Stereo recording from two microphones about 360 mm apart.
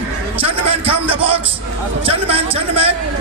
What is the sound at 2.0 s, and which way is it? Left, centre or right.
Speech, centre.